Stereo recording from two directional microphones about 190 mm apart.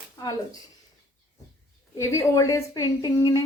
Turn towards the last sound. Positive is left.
turn(degrees=20)  # may be behind; listen again after turning